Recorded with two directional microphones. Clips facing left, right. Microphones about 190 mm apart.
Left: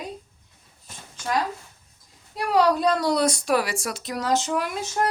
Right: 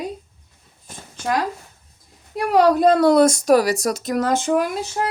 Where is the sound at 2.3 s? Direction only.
50° right (ahead or behind).